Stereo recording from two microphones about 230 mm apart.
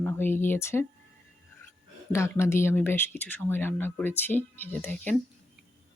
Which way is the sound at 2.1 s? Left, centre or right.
Centre.